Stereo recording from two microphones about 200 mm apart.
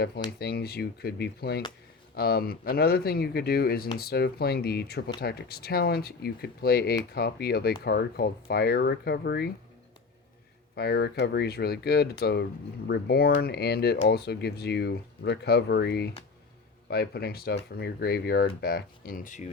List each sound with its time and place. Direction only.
0.3 s speech: 50° left (ahead or behind)
10.8 s speech: 50° left (ahead or behind)